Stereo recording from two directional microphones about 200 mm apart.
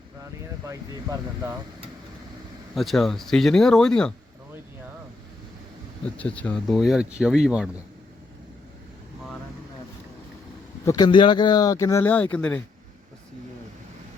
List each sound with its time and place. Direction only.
0.2 s speech: 15° right (ahead or behind)
2.7 s speech: centre (ahead or behind)
6.1 s speech: 5° left (ahead or behind)
10.8 s speech: 20° left (ahead or behind)